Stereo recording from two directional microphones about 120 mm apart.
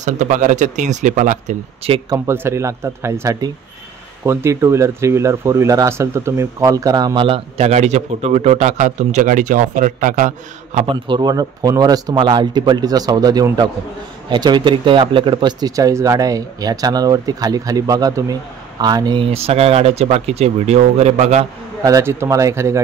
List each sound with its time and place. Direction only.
0.0 s speech: 90° right
2.0 s speech: 25° right (ahead or behind); by 10.9 s 80° right
10.9 s speech: 40° right (ahead or behind)
19.2 s speech: 55° right (ahead or behind)
21.8 s speech: 25° right (ahead or behind)